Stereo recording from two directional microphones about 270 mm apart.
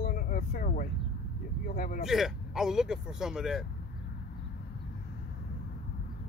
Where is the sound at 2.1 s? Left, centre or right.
Centre.